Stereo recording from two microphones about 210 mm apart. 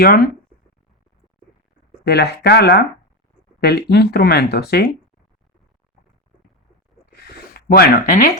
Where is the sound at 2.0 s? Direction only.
50° left (ahead or behind).